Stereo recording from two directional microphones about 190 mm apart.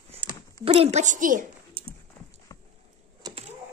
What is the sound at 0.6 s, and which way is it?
Speech, 35° right (ahead or behind).